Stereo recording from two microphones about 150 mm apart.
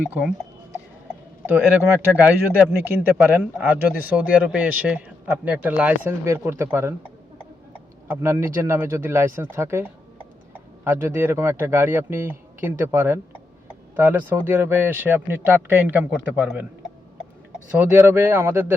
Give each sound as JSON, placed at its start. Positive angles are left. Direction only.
{"t": 0.0, "sound": "a sound", "side_deg": -5}
{"t": 1.5, "sound": "speech", "side_deg": -10}
{"t": 8.0, "sound": "speech", "side_deg": -15}
{"t": 17.7, "sound": "speech", "side_deg": -15}